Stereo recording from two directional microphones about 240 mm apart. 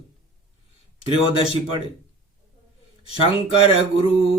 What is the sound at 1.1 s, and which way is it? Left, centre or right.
Mantra, left.